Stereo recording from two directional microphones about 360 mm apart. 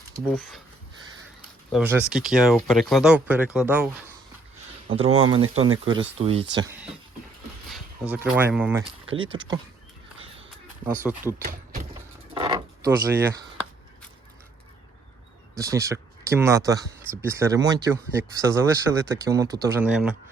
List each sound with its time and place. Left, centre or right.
1.7 s speech: centre
4.9 s speech: centre
6.6 s speech: centre
9.1 s speech: centre
10.8 s speech: centre
11.4 s speech: right
12.3 s a sound: centre
15.5 s speech: centre